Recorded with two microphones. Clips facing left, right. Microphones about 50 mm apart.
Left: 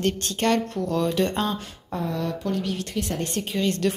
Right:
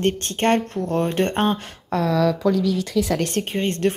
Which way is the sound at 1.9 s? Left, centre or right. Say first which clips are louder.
Right 7 dB; right.